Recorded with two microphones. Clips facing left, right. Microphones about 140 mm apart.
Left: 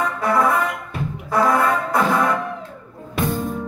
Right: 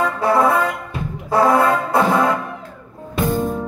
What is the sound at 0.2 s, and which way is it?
Music, 30° right (ahead or behind).